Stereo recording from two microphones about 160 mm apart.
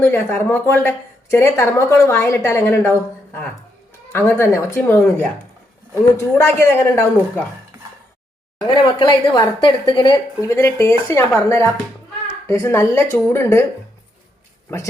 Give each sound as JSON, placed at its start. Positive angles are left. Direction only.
{"t": 0.0, "sound": "speech", "side_deg": 15}
{"t": 8.6, "sound": "a woman's voice", "side_deg": 30}